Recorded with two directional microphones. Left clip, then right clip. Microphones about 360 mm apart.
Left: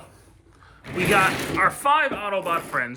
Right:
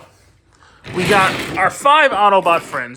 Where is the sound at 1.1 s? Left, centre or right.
Centre.